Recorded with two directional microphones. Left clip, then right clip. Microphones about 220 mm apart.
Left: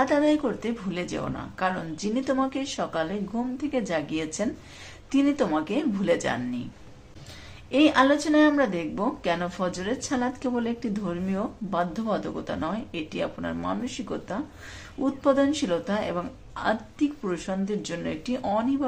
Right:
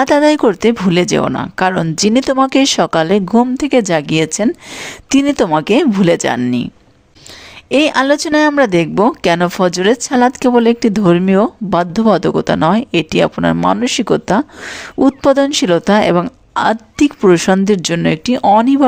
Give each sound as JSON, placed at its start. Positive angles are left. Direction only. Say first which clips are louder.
{"t": 0.0, "sound": "a woman's voice", "louder": "right 13 dB", "side_deg": -50}
{"t": 7.7, "sound": "a woman's voice", "louder": "right 9 dB", "side_deg": -50}